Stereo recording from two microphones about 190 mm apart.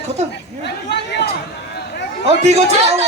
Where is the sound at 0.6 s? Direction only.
60° left (ahead or behind).